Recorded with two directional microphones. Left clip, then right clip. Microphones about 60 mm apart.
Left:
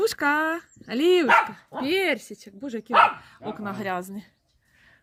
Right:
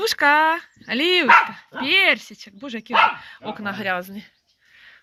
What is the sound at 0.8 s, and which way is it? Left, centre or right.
Speech, left.